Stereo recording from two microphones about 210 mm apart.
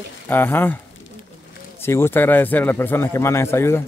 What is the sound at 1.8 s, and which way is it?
A man's voice, 10° left (ahead or behind).